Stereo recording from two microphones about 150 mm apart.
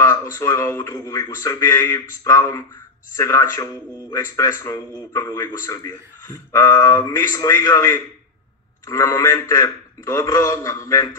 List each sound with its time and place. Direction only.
0.0 s a man's voice: 20° left (ahead or behind)